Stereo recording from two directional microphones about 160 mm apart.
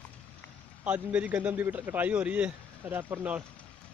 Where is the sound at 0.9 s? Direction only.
10° right (ahead or behind).